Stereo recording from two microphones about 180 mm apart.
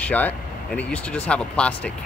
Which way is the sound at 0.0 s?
10° left (ahead or behind).